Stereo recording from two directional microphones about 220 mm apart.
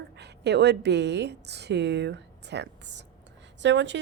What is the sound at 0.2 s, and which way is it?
A woman's voice, 50° right (ahead or behind).